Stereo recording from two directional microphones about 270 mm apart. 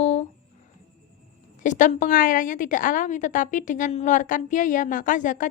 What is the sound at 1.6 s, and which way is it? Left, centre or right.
A woman's voice, left.